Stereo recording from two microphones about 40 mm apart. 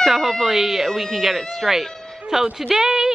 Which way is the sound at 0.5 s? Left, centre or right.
Centre.